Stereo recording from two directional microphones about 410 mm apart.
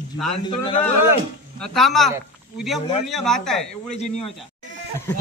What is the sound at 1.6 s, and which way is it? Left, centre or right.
A man's voice, centre.